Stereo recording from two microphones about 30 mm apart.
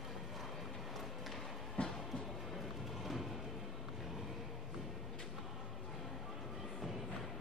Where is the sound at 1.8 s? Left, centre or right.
Left.